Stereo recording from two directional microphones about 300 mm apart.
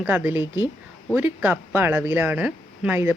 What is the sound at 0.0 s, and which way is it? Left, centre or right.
Speech, centre.